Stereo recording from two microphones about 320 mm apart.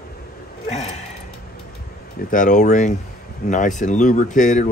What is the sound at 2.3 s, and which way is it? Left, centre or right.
Speech, left.